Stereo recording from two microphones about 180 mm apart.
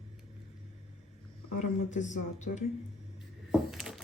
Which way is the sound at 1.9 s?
40° left (ahead or behind).